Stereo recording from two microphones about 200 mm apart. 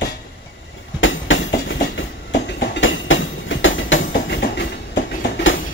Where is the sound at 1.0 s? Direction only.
75° left (ahead or behind).